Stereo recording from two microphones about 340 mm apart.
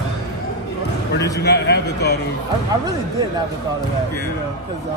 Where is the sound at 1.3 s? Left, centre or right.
Left.